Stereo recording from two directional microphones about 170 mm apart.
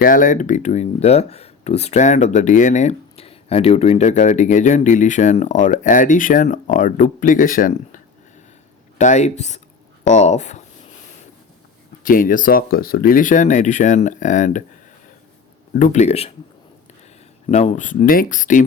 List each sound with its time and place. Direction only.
0.0 s speech: 50° left (ahead or behind)
12.0 s speech: 55° left (ahead or behind)
15.7 s speech: 50° left (ahead or behind)
17.5 s speech: 40° left (ahead or behind)